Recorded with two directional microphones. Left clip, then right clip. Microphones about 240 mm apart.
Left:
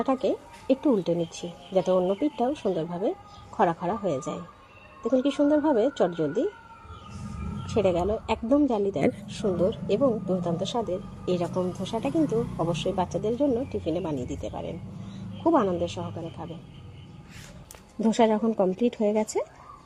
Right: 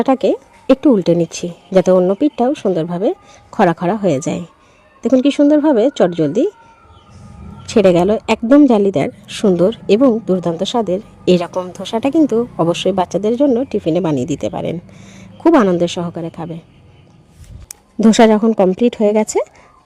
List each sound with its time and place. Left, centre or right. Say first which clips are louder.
0.0 s speech: right 12 dB; right
7.7 s speech: right 13 dB; right
9.0 s a woman's voice: right 8 dB; centre
9.2 s speech: right 12 dB; right
18.0 s a woman's voice: right 12 dB; right